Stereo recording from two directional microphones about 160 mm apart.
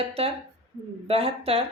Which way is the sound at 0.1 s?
35° right (ahead or behind).